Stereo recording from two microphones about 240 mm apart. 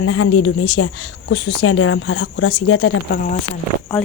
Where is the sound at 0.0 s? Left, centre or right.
Left.